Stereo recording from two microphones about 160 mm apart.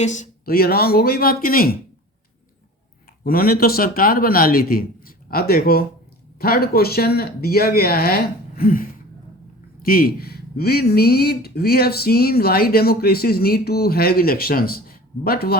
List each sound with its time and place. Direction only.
0.0 s speech: 50° left (ahead or behind)
0.4 s speech: 70° left (ahead or behind)
3.2 s speech: 70° left (ahead or behind)